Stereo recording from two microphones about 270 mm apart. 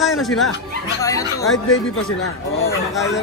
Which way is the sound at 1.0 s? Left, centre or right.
Centre.